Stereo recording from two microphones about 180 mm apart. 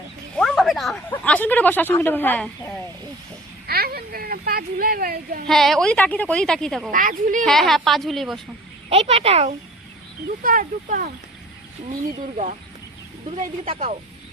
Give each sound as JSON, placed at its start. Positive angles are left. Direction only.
{"t": 0.3, "sound": "speech", "side_deg": 0}
{"t": 3.7, "sound": "a sound", "side_deg": -60}
{"t": 5.5, "sound": "a woman's voice", "side_deg": 0}
{"t": 6.9, "sound": "speech", "side_deg": -50}
{"t": 7.4, "sound": "a woman's voice", "side_deg": 0}
{"t": 8.9, "sound": "speech", "side_deg": -35}
{"t": 10.4, "sound": "speech", "side_deg": -50}
{"t": 13.7, "sound": "speech", "side_deg": -35}